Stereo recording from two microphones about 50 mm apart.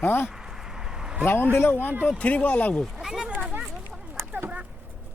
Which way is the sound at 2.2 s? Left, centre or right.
Left.